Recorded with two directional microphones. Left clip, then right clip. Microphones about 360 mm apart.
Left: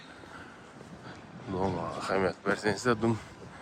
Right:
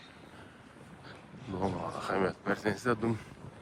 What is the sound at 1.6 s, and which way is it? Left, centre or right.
Speech, centre.